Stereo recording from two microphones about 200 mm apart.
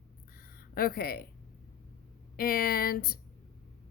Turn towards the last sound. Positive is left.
turn(degrees=45)  # may be behind; listen again after turning